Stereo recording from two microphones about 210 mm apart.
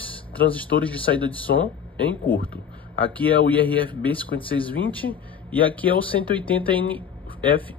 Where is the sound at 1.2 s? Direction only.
25° right (ahead or behind).